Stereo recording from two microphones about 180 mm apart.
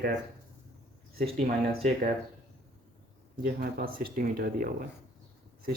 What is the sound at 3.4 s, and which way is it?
Speech, 55° right (ahead or behind).